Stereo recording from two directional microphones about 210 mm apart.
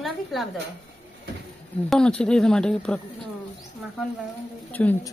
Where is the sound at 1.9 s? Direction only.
5° left (ahead or behind).